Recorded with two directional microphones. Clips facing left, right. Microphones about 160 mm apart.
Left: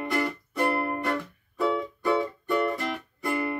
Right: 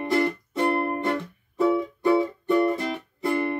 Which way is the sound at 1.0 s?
20° right (ahead or behind).